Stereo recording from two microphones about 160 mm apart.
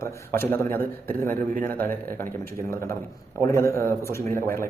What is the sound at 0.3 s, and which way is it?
Speech, 15° left (ahead or behind).